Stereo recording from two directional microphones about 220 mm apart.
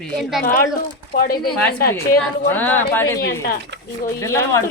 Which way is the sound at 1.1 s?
45° left (ahead or behind).